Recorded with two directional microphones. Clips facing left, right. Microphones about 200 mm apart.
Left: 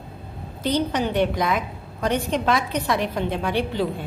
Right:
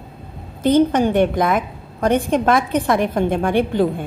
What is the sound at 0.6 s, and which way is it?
A woman's voice, 50° right (ahead or behind).